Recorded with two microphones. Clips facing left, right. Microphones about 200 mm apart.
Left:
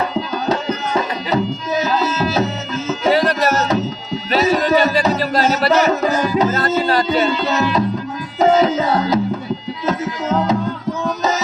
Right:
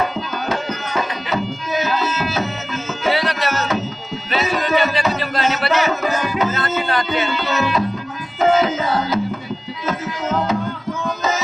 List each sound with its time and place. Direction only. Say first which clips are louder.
0.4 s music: left 3 dB; 35° left (ahead or behind)
11.0 s tabla: left 2 dB; 40° left (ahead or behind)